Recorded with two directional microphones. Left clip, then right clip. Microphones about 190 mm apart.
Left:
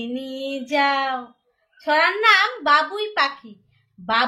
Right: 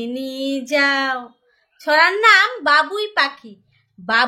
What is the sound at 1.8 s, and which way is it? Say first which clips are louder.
Speech: right 4 dB; 30° right (ahead or behind).